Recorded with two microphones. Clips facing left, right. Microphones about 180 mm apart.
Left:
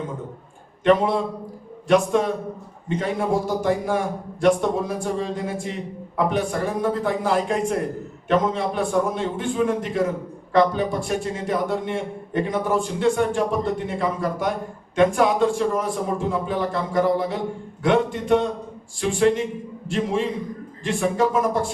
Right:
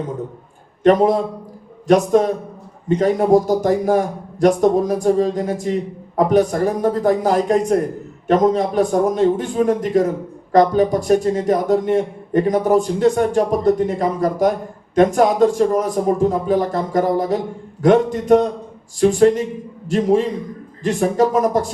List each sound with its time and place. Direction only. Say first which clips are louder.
0.9 s a man's voice: right 5 dB; 40° right (ahead or behind)